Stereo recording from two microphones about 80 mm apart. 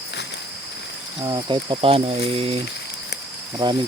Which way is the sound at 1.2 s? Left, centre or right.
Right.